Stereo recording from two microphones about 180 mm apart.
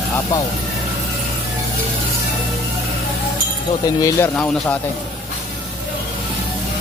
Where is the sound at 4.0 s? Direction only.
20° left (ahead or behind).